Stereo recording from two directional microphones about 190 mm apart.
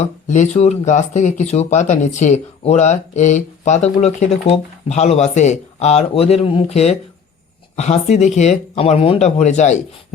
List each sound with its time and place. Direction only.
0.0 s speech: 40° left (ahead or behind)